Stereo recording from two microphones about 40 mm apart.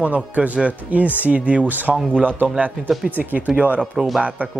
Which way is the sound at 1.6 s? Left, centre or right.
Right.